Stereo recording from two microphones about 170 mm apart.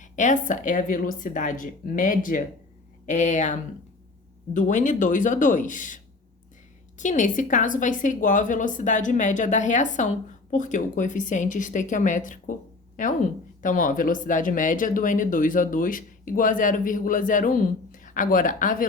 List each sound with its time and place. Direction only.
0.0 s a woman's voice: 45° left (ahead or behind)